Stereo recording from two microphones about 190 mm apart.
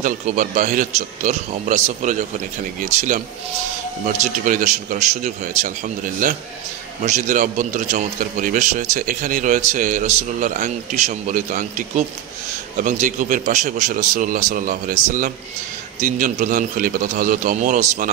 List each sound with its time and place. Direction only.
0.0 s a man's voice: 45° right (ahead or behind)
12.7 s a man's voice: 40° right (ahead or behind)